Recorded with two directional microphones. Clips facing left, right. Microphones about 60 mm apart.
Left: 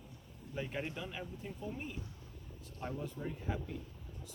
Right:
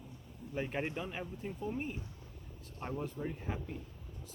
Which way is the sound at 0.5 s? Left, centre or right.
Right.